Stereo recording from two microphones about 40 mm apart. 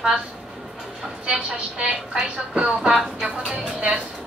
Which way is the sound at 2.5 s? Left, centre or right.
Centre.